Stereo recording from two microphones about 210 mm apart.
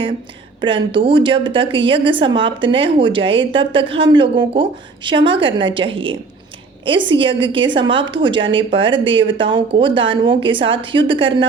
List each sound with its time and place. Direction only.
0.6 s a woman's voice: 25° right (ahead or behind)